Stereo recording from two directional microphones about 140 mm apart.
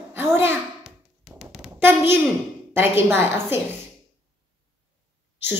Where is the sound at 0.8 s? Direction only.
Centre (ahead or behind).